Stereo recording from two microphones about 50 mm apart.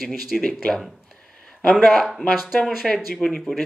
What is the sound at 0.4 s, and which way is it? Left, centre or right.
Speech, centre.